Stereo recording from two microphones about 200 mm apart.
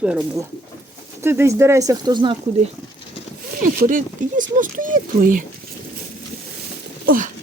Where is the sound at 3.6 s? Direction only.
45° right (ahead or behind).